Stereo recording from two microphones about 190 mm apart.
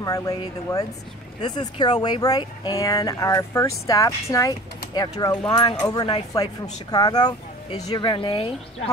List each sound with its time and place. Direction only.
0.0 s speech: 20° left (ahead or behind)